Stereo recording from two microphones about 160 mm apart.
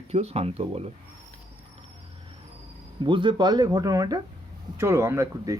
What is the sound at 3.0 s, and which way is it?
Speech, 30° right (ahead or behind).